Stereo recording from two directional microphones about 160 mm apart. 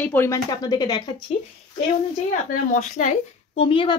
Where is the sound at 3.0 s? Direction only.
55° left (ahead or behind).